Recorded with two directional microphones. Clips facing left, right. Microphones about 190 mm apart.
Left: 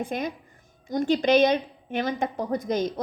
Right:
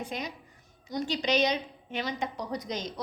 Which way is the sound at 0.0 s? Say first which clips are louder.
Left 7 dB; 50° left (ahead or behind).